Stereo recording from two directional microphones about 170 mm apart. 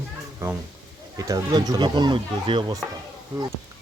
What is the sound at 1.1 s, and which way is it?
Speech, 20° right (ahead or behind).